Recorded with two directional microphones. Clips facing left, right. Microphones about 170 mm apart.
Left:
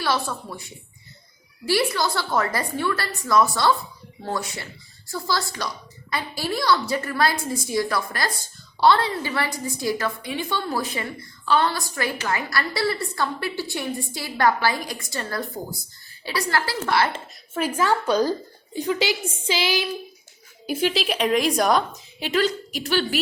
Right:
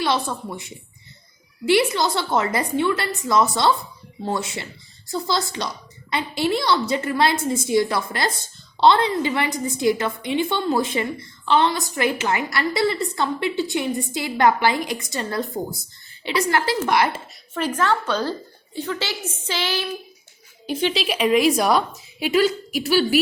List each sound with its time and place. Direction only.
0.0 s a woman's voice: 20° right (ahead or behind)
17.5 s a woman's voice: 10° left (ahead or behind); by 23.2 s 10° right (ahead or behind)